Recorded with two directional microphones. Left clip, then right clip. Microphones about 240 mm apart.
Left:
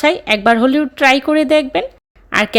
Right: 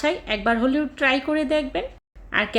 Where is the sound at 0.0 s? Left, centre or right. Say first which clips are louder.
Left 10 dB; left.